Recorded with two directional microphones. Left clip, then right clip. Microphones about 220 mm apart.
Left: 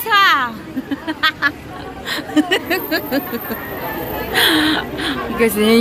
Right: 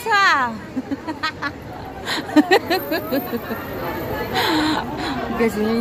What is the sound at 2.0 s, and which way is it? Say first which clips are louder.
Speech: right 1 dB; 10° right (ahead or behind).